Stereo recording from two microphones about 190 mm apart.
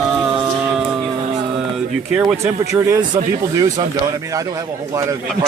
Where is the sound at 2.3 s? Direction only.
15° right (ahead or behind).